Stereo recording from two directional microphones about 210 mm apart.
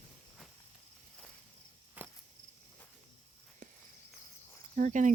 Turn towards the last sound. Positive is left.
turn(degrees=-35)  # may be behind; listen again after turning